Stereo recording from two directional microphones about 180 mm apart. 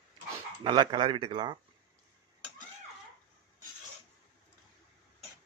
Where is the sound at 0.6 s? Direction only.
25° right (ahead or behind).